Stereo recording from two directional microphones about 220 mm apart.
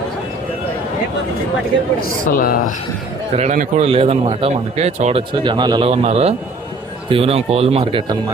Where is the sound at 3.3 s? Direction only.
35° right (ahead or behind).